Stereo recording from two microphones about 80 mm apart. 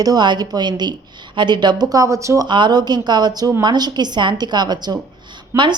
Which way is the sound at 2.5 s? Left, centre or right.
Right.